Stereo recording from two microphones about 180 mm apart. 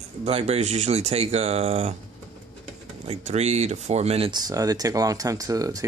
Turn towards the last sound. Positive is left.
turn(degrees=-20)  # may be behind; listen again after turning